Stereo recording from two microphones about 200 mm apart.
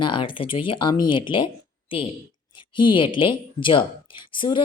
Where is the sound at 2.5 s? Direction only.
25° left (ahead or behind).